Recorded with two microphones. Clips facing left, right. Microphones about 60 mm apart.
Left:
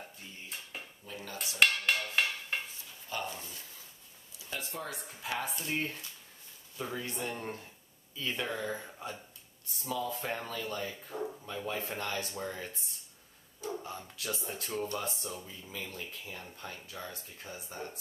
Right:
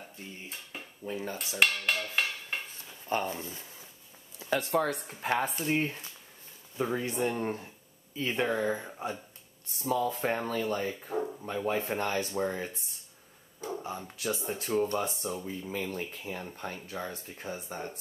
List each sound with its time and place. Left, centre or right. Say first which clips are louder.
1.0 s speech: right 10 dB; right
1.6 s a sound: even; centre
3.1 s speech: right 7 dB; right
4.5 s speech: right 12 dB; right
5.0 s speech: right 7 dB; right
5.6 s speech: right 6 dB; right
9.8 s speech: right 6 dB; right
13.7 s a sound: right 4 dB; centre
14.0 s speech: right 6 dB; centre